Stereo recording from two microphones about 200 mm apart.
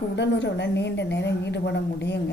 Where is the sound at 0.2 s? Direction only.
60° left (ahead or behind).